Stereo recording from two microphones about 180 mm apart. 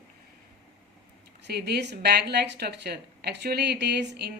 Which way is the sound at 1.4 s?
65° right (ahead or behind).